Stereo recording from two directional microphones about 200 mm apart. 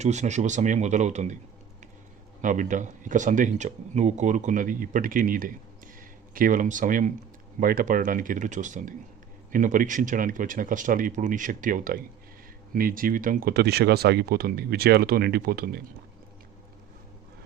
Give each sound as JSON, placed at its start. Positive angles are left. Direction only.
{"t": 0.0, "sound": "speech", "side_deg": -35}
{"t": 2.4, "sound": "speech", "side_deg": -40}